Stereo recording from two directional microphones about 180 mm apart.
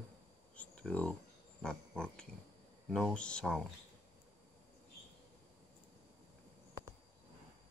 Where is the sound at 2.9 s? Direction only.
Centre (ahead or behind).